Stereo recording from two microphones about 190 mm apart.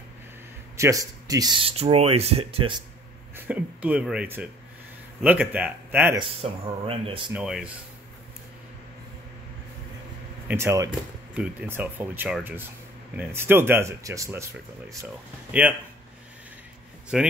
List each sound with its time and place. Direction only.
0.7 s speech: 15° right (ahead or behind)
3.3 s speech: 5° right (ahead or behind)
6.1 s speech: 30° right (ahead or behind)
7.3 s speech: 5° right (ahead or behind)
10.5 s speech: 15° right (ahead or behind)
17.1 s speech: 5° right (ahead or behind)